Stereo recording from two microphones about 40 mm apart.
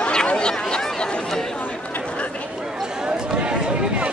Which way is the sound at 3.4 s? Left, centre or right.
Right.